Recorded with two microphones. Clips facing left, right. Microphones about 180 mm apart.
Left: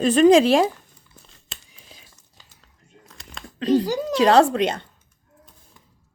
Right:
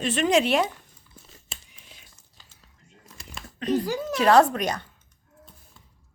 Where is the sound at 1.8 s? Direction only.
35° left (ahead or behind).